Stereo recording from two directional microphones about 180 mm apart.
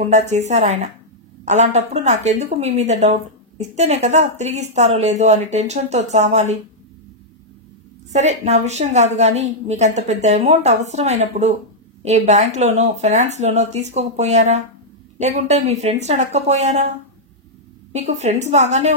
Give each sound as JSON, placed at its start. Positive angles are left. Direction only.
{"t": 0.1, "sound": "a woman's voice", "side_deg": -40}
{"t": 8.1, "sound": "a woman's voice", "side_deg": -40}
{"t": 17.9, "sound": "a woman's voice", "side_deg": -40}